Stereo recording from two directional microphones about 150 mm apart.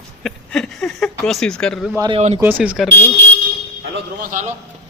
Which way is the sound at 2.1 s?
45° right (ahead or behind).